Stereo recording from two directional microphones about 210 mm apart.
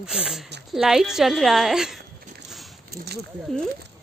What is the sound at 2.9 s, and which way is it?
Speech, 50° right (ahead or behind).